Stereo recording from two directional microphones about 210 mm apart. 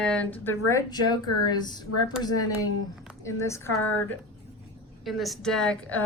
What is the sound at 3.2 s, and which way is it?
Speech, 15° left (ahead or behind).